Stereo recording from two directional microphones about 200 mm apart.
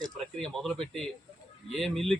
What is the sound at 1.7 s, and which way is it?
Speech, centre (ahead or behind).